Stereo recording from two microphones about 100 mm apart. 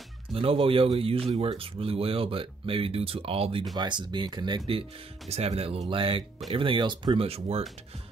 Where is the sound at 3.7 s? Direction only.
50° right (ahead or behind).